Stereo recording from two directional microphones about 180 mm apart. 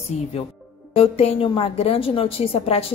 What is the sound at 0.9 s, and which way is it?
A woman's voice, 35° left (ahead or behind).